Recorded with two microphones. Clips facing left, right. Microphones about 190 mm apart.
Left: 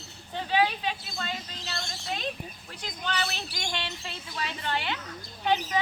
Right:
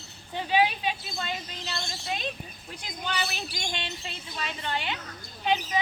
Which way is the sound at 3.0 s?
15° right (ahead or behind).